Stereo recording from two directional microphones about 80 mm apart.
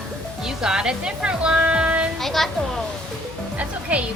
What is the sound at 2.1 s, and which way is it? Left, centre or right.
Speech, centre.